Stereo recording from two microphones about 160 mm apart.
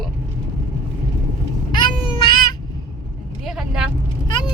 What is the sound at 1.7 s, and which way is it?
Babbling, 30° left (ahead or behind).